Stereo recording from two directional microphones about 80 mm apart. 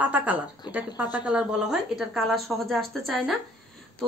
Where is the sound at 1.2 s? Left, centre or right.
Centre.